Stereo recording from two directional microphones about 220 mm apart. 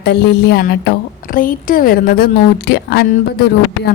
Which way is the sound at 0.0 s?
50° left (ahead or behind).